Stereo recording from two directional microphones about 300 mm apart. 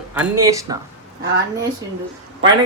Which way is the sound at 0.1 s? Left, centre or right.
Centre.